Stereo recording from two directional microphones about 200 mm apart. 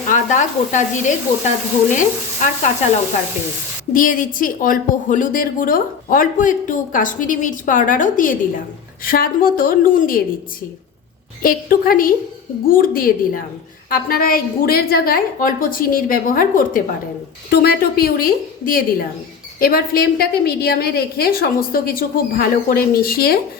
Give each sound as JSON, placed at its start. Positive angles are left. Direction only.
{"t": 0.1, "sound": "speech", "side_deg": 40}
{"t": 3.9, "sound": "a woman's voice", "side_deg": 45}
{"t": 11.4, "sound": "a woman's voice", "side_deg": 45}